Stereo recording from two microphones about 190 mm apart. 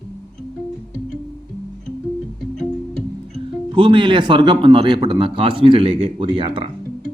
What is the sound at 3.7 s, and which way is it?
A man's voice, 25° right (ahead or behind).